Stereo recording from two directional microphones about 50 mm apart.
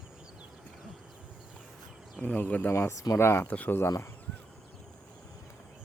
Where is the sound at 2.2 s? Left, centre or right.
Left.